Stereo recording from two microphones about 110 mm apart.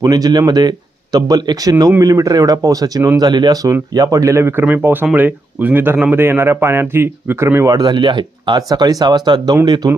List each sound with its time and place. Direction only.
0.0 s a man's voice: 35° right (ahead or behind)